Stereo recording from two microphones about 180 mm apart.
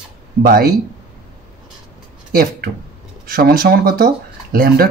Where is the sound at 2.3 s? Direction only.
55° right (ahead or behind).